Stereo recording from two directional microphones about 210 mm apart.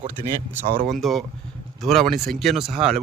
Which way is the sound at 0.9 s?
Centre (ahead or behind).